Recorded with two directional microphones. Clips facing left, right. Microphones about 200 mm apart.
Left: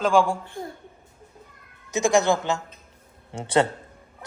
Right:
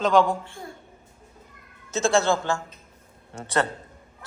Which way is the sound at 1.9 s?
15° left (ahead or behind).